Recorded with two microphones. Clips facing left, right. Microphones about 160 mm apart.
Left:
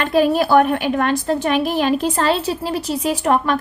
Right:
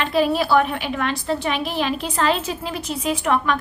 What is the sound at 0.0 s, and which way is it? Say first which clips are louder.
A woman's voice: left 4 dB; 45° left (ahead or behind).